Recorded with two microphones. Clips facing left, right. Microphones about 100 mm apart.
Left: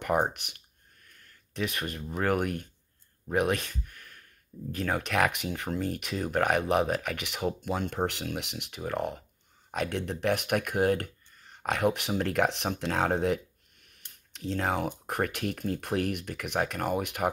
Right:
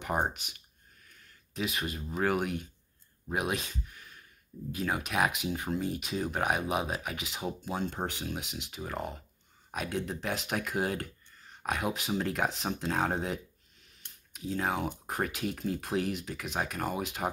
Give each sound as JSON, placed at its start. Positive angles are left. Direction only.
{"t": 0.0, "sound": "speech", "side_deg": 60}